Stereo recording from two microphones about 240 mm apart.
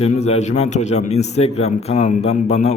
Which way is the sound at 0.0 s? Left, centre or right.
Left.